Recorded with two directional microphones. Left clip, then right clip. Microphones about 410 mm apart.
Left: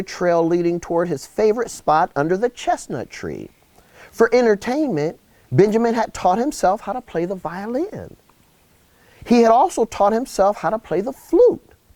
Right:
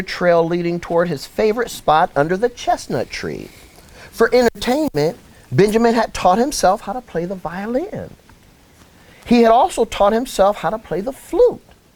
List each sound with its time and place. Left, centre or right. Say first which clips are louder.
0.0 s speech: right 3 dB; left
3.9 s speech: right 1 dB; left
9.2 s speech: right 1 dB; left